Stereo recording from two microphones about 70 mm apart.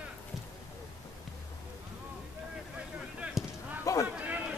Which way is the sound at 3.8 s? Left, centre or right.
Left.